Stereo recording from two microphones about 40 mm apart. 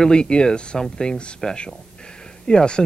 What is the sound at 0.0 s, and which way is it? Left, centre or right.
Speech, left.